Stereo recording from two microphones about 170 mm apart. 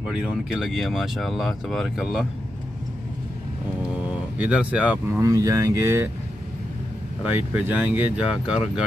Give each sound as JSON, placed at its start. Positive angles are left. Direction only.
{"t": 0.0, "sound": "speech", "side_deg": -5}
{"t": 4.4, "sound": "speech", "side_deg": -5}
{"t": 5.2, "sound": "speech", "side_deg": -20}
{"t": 7.2, "sound": "speech", "side_deg": -10}